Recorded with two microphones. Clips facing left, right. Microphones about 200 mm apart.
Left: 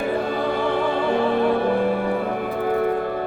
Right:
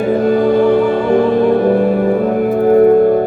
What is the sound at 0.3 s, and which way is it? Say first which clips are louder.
Music: right 12 dB; 45° right (ahead or behind).